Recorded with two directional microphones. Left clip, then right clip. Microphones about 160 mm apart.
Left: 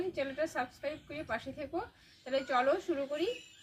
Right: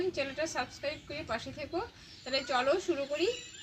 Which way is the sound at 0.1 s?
5° left (ahead or behind).